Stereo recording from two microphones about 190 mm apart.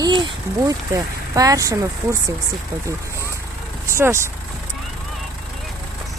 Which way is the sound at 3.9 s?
15° right (ahead or behind).